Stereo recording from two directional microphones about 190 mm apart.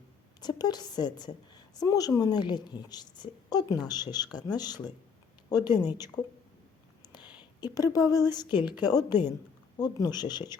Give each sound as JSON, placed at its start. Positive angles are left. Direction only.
{"t": 0.4, "sound": "a woman's voice", "side_deg": 20}
{"t": 7.2, "sound": "a sound", "side_deg": -5}
{"t": 7.6, "sound": "a woman's voice", "side_deg": 20}
{"t": 8.5, "sound": "a woman's voice", "side_deg": -5}
{"t": 8.9, "sound": "a woman's voice", "side_deg": 20}